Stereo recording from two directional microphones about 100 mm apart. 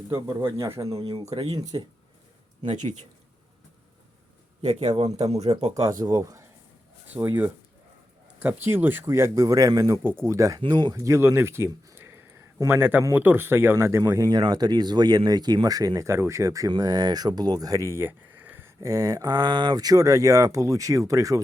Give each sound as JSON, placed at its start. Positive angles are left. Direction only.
{"t": 0.1, "sound": "speech", "side_deg": -40}
{"t": 1.3, "sound": "speech", "side_deg": -70}
{"t": 4.9, "sound": "speech", "side_deg": -80}
{"t": 5.8, "sound": "speech", "side_deg": -35}
{"t": 7.1, "sound": "speech", "side_deg": -20}
{"t": 10.6, "sound": "speech", "side_deg": -45}
{"t": 10.9, "sound": "speech", "side_deg": -30}
{"t": 18.8, "sound": "speech", "side_deg": -35}